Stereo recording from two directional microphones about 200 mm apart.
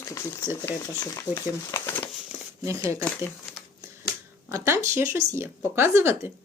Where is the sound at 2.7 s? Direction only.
15° right (ahead or behind).